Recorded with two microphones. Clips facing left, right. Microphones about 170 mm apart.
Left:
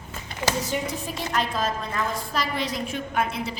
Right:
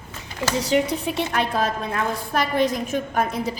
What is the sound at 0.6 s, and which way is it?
A woman's voice, 70° right (ahead or behind).